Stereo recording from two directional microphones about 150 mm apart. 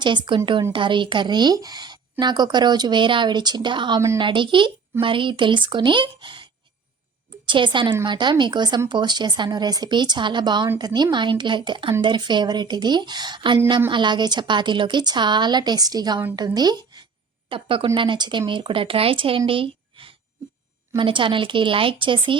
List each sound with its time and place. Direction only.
0.0 s speech: 30° right (ahead or behind)
19.5 s a sound: 35° right (ahead or behind)
20.9 s speech: 35° right (ahead or behind)